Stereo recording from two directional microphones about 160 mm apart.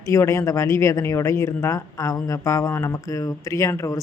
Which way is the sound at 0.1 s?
15° left (ahead or behind).